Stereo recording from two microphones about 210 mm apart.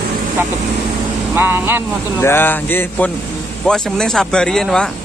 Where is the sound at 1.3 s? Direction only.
10° right (ahead or behind).